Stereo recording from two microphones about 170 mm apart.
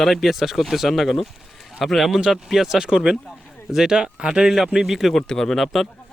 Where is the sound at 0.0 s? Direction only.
Centre (ahead or behind).